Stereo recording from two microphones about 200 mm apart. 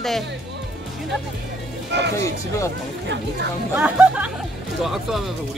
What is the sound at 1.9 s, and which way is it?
Speech, 60° right (ahead or behind).